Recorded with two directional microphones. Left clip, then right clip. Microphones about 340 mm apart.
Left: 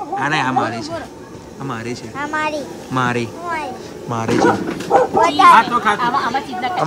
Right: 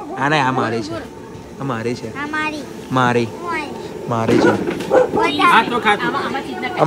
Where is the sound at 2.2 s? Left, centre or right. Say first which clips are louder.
Left 2 dB; centre.